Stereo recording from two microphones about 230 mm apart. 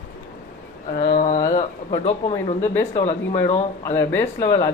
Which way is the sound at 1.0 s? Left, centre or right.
Left.